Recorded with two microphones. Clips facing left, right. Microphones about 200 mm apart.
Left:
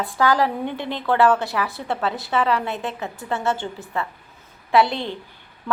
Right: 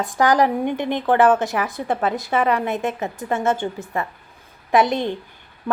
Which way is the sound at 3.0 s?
15° right (ahead or behind).